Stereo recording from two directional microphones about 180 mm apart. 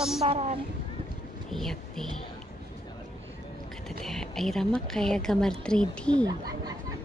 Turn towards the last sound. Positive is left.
turn(degrees=5)  # may be behind; listen again after turning